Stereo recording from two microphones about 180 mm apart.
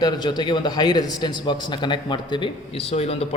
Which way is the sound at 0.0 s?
25° left (ahead or behind).